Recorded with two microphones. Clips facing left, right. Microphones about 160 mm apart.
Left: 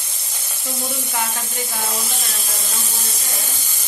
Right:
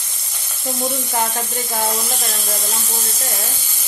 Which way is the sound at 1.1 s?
45° right (ahead or behind).